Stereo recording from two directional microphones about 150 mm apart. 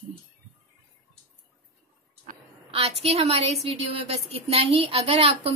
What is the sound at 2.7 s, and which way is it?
A woman's voice, 40° right (ahead or behind).